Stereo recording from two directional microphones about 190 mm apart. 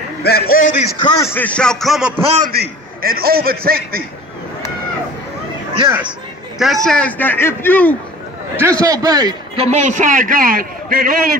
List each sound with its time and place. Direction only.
0.2 s a man's voice: 55° left (ahead or behind)
1.0 s a man's voice: 15° left (ahead or behind); by 2.2 s centre (ahead or behind)
2.3 s a man's voice: 45° right (ahead or behind)
6.6 s a man's voice: centre (ahead or behind)
8.5 s a man's voice: 15° right (ahead or behind)
9.7 s a man's voice: 40° right (ahead or behind)